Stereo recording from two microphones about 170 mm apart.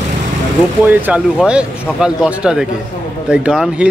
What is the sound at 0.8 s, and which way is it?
Speech, 10° right (ahead or behind).